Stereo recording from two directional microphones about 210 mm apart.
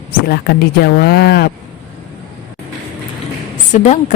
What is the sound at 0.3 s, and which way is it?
Speech, 50° left (ahead or behind).